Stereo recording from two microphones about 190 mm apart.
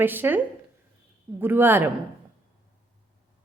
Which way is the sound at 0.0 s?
10° right (ahead or behind).